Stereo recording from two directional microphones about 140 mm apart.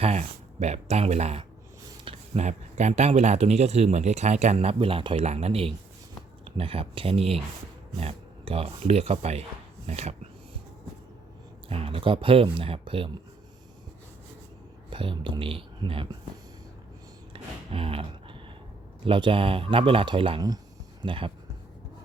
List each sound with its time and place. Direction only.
0.0 s speech: 50° right (ahead or behind)
11.7 s speech: 40° right (ahead or behind)
14.8 s speech: 35° right (ahead or behind)
17.3 s a sound: 40° right (ahead or behind)
19.0 s speech: 40° right (ahead or behind)